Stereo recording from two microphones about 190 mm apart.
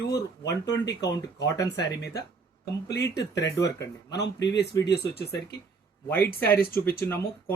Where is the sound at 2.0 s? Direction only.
60° left (ahead or behind).